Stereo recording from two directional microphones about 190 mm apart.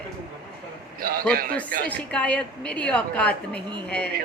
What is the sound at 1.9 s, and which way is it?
A woman's voice, 5° left (ahead or behind).